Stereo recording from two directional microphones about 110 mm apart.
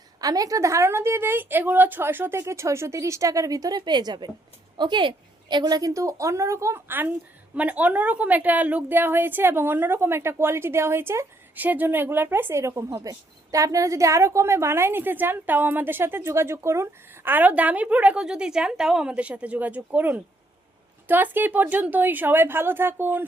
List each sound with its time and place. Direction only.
0.2 s a woman's voice: 35° right (ahead or behind); by 23.2 s 20° right (ahead or behind)